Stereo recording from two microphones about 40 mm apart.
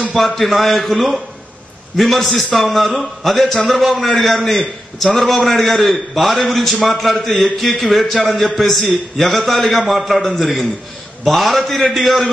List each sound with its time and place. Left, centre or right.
0.1 s a man's voice: centre